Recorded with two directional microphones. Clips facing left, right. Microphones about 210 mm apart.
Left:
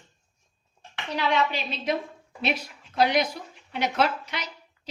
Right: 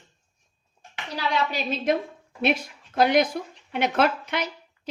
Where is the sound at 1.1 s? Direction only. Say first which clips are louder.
Left 1 dB; 40° right (ahead or behind).